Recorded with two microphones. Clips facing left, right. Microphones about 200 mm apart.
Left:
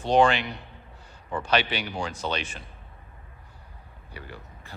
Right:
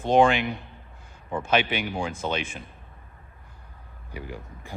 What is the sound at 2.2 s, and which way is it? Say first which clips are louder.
Speech: right 1 dB; 15° right (ahead or behind).